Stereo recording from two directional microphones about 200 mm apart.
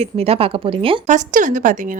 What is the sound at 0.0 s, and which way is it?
A woman's voice, 30° right (ahead or behind).